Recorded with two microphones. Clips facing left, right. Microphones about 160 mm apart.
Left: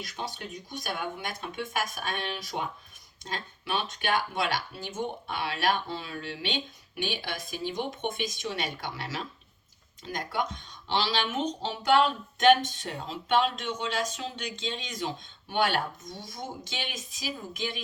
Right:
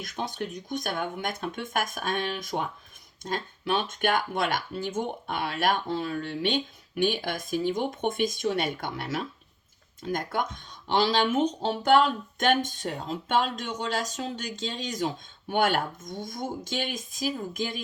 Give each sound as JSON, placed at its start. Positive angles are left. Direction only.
{"t": 0.0, "sound": "speech", "side_deg": -50}